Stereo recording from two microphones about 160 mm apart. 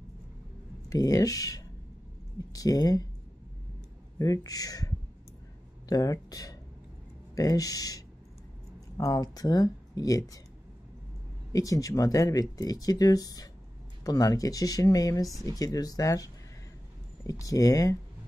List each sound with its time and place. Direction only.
0.8 s speech: 20° left (ahead or behind)
4.2 s speech: 20° left (ahead or behind)
11.5 s speech: 20° left (ahead or behind)
17.3 s speech: 20° left (ahead or behind)